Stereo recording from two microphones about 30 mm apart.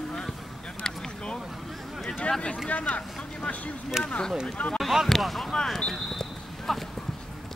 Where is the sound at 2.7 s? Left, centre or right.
Left.